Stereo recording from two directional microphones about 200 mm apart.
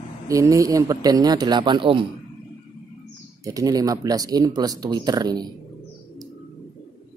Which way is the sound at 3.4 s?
15° right (ahead or behind).